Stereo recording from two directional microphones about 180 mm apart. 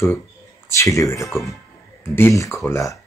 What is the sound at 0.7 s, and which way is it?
Speech, 15° left (ahead or behind).